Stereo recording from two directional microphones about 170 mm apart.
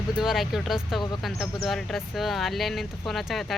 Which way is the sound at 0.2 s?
Centre (ahead or behind).